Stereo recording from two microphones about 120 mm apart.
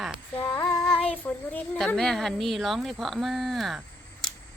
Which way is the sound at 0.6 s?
35° left (ahead or behind).